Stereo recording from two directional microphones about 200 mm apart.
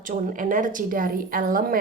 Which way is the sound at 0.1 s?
40° right (ahead or behind).